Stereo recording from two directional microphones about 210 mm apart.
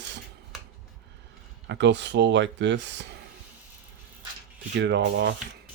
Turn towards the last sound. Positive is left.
turn(degrees=-55)  # may be behind; listen again after turning